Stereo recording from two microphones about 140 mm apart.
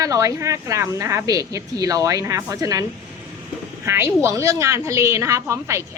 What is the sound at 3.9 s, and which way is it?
Speech, 20° right (ahead or behind).